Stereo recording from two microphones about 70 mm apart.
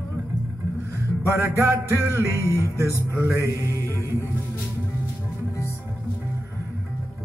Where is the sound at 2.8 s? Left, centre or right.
Right.